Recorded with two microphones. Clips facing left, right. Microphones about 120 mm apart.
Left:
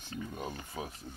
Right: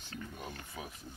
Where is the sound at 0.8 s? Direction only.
35° left (ahead or behind).